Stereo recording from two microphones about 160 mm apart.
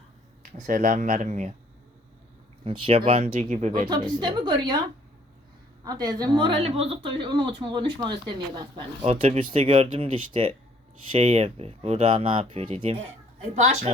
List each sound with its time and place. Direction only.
0.5 s speech: 60° right (ahead or behind)
2.6 s speech: 35° right (ahead or behind)
3.8 s speech: 25° right (ahead or behind)
5.8 s speech: 25° right (ahead or behind); by 13.0 s 40° right (ahead or behind)